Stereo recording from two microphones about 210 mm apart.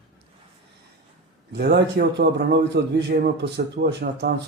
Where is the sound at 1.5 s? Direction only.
50° right (ahead or behind).